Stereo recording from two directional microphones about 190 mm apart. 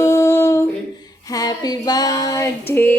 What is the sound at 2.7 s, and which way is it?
Speech, 10° left (ahead or behind).